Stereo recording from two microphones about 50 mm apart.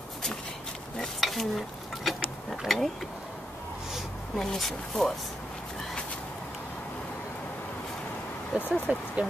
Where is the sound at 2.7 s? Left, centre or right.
Centre.